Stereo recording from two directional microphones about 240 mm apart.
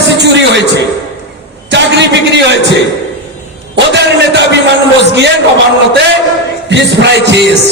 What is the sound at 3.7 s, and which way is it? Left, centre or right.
Music, right.